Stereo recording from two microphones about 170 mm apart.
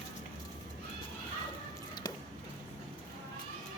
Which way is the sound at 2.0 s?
25° left (ahead or behind).